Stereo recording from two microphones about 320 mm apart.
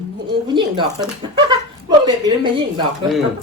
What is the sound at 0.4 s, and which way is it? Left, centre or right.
A woman's voice, centre.